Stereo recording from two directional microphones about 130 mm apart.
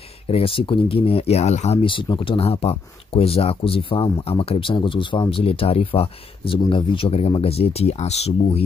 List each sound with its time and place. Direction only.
0.3 s speech: 45° left (ahead or behind)
1.9 s speech: 40° left (ahead or behind)